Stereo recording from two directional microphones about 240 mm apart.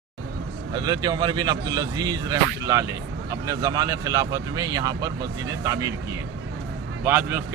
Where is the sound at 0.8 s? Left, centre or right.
Centre.